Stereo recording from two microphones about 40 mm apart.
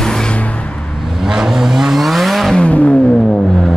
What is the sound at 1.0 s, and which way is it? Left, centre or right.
Vehicle, centre.